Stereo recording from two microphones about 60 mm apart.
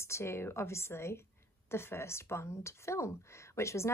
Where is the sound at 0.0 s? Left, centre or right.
Left.